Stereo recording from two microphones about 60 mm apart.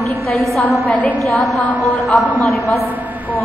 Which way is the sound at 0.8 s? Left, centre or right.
Left.